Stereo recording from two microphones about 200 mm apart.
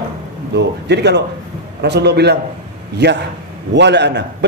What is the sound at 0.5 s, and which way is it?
A man's voice, 60° right (ahead or behind).